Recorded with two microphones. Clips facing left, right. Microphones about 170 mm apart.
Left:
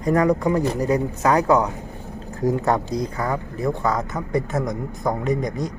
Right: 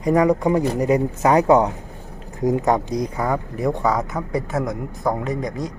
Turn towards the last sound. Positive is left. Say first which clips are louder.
# left 2 dB
turn(degrees=0)  # may be behind; listen again after turning